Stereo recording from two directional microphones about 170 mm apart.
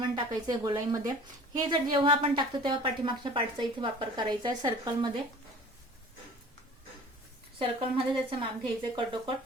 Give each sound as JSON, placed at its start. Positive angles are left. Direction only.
{"t": 0.0, "sound": "a woman's voice", "side_deg": -25}
{"t": 7.6, "sound": "speech", "side_deg": -30}